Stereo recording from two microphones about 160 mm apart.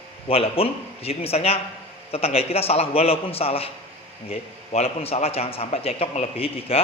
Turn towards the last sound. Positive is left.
turn(degrees=35)  # may be behind; listen again after turning